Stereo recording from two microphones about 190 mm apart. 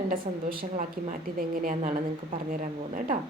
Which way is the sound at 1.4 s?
45° right (ahead or behind).